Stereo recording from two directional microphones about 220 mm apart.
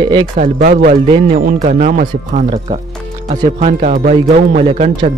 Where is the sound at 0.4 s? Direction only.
35° right (ahead or behind).